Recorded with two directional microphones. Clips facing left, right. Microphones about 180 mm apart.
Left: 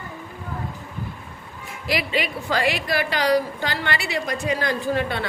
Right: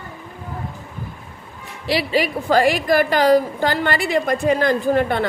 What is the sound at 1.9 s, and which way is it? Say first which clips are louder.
A woman's voice: right 5 dB; 35° right (ahead or behind).